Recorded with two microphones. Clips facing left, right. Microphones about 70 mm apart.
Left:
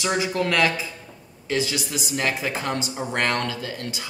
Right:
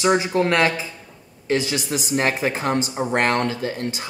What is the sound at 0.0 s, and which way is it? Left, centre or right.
Speech, right.